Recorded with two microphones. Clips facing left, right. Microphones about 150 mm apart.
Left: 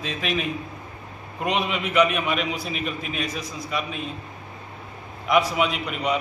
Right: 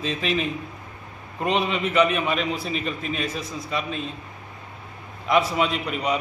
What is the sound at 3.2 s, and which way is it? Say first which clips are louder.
Speech: right 1 dB; 30° right (ahead or behind).